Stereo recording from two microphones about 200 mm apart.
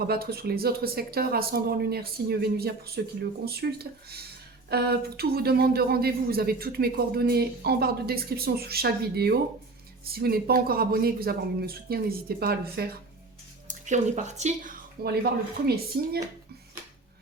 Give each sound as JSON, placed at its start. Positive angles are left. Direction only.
{"t": 0.1, "sound": "speech", "side_deg": -50}
{"t": 13.7, "sound": "speech", "side_deg": -35}